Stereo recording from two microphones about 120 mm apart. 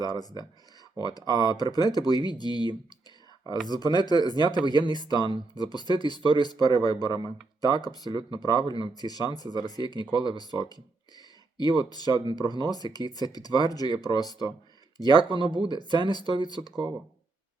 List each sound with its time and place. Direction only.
0.0 s speech: 35° left (ahead or behind)
15.3 s speech: 40° right (ahead or behind)
15.5 s speech: 35° left (ahead or behind)